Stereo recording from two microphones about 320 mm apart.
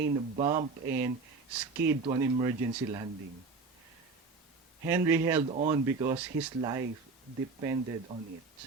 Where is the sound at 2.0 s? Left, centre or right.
Centre.